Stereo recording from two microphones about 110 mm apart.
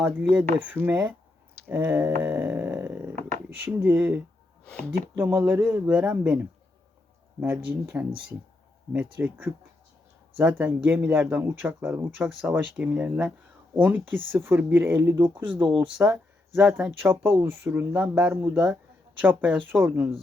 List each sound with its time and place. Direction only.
0.0 s speech: 15° right (ahead or behind)
2.2 s a sound: 15° right (ahead or behind)
3.6 s speech: 20° right (ahead or behind)
4.6 s speech: 10° left (ahead or behind)
5.1 s speech: 20° right (ahead or behind)
7.4 s speech: 15° right (ahead or behind)